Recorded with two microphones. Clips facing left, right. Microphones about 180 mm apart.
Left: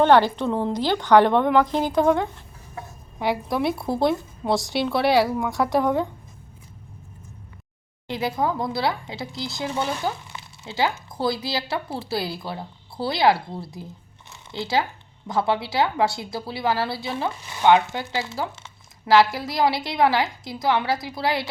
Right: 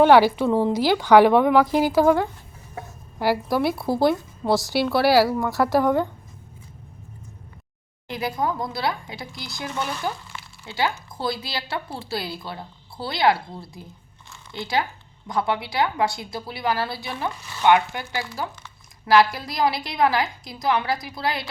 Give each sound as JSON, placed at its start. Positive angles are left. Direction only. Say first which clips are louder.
{"t": 0.0, "sound": "a woman's voice", "louder": "right 2 dB", "side_deg": -10}
{"t": 8.0, "sound": "a woman's voice", "louder": "left 1 dB", "side_deg": 20}
{"t": 15.3, "sound": "a woman's voice", "louder": "left 2 dB", "side_deg": 20}